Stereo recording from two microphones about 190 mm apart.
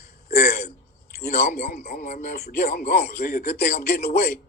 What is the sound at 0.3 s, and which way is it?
A man's voice, 55° left (ahead or behind).